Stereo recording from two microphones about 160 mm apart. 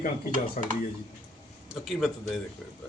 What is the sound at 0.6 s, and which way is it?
Stir, 50° left (ahead or behind).